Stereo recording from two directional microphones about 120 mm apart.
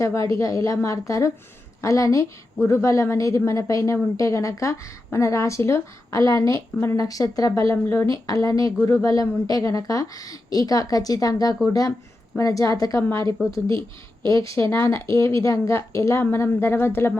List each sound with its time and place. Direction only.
0.0 s a woman's voice: 25° left (ahead or behind)
13.7 s speech: 45° right (ahead or behind)
14.7 s a woman's voice: 20° left (ahead or behind)